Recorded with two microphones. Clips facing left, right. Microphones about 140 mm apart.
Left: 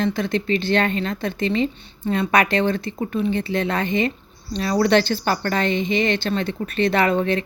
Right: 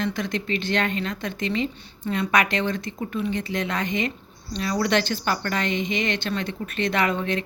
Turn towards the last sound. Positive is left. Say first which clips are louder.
# left 5 dB
turn(degrees=35)  # may be behind; listen again after turning